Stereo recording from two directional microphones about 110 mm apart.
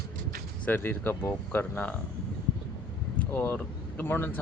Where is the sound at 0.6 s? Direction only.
20° left (ahead or behind).